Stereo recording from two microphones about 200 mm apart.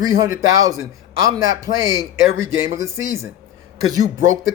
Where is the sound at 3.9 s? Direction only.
15° right (ahead or behind).